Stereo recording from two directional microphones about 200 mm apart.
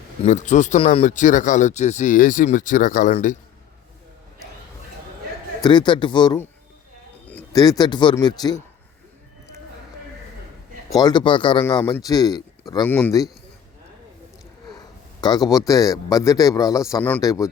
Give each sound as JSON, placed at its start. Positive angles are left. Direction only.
{"t": 0.3, "sound": "speech", "side_deg": 35}
{"t": 5.6, "sound": "speech", "side_deg": 20}
{"t": 7.5, "sound": "speech", "side_deg": 20}
{"t": 10.9, "sound": "speech", "side_deg": 20}
{"t": 15.2, "sound": "speech", "side_deg": 20}